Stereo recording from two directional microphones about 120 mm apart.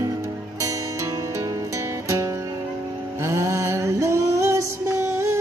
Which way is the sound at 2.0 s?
25° right (ahead or behind).